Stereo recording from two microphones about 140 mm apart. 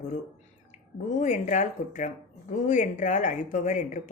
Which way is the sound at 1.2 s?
60° left (ahead or behind).